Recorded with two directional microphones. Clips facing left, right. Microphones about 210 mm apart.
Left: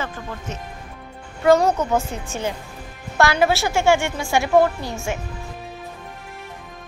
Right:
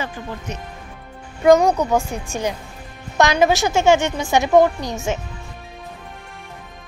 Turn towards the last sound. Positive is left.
turn(degrees=-20)  # may be behind; listen again after turning